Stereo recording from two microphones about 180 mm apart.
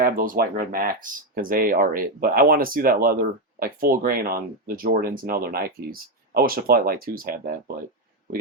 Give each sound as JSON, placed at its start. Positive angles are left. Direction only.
{"t": 0.0, "sound": "speech", "side_deg": -50}